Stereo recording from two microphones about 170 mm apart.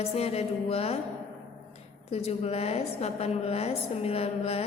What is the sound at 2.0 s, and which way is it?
A woman's voice, 40° left (ahead or behind).